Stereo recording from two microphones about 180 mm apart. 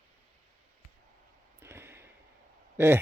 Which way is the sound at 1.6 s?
15° right (ahead or behind).